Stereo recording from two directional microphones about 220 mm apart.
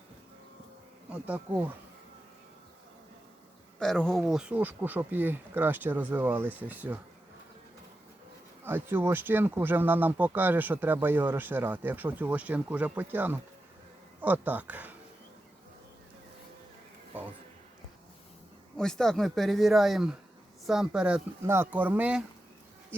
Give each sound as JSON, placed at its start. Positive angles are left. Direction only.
{"t": 1.1, "sound": "speech", "side_deg": -5}
{"t": 3.8, "sound": "speech", "side_deg": 5}
{"t": 8.6, "sound": "speech", "side_deg": -10}
{"t": 18.8, "sound": "speech", "side_deg": 0}